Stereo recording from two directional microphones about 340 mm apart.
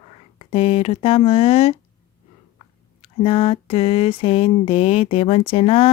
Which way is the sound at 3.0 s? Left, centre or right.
Centre.